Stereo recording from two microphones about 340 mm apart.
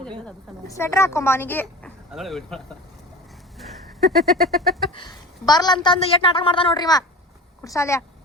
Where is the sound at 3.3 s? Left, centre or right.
Centre.